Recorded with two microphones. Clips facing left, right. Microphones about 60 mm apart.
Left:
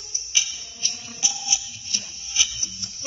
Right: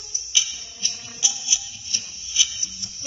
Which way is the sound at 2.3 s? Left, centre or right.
Left.